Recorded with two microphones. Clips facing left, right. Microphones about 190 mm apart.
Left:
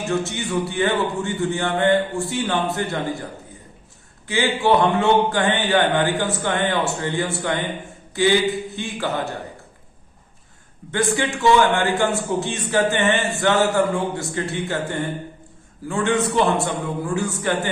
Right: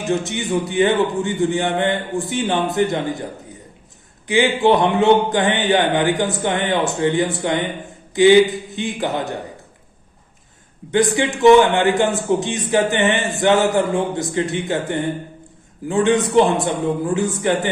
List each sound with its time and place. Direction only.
0.1 s a man's voice: 20° right (ahead or behind)
4.3 s a man's voice: 20° right (ahead or behind)
10.9 s a man's voice: 20° right (ahead or behind)